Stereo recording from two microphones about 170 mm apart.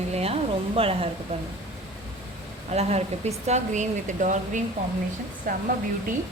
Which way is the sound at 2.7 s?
40° right (ahead or behind).